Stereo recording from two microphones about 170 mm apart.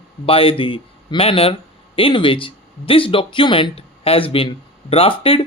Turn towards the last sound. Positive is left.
turn(degrees=35)  # may be behind; listen again after turning